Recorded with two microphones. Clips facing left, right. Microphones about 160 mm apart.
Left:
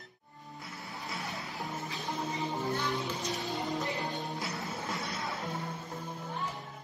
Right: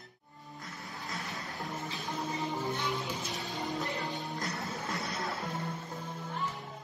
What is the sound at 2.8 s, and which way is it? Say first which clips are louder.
Music: left 2 dB; centre (ahead or behind).